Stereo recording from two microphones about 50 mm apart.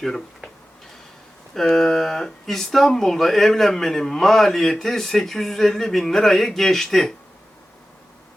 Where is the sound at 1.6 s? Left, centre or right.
Centre.